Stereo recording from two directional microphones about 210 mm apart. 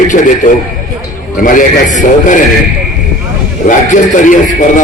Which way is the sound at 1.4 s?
40° left (ahead or behind).